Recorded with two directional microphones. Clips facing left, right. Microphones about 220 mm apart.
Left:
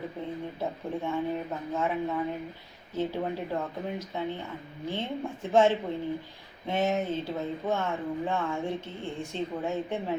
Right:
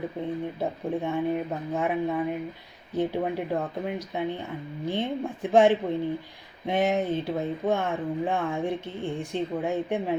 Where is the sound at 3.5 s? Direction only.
15° right (ahead or behind).